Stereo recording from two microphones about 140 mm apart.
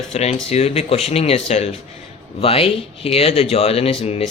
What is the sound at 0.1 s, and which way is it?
Speech, 50° left (ahead or behind).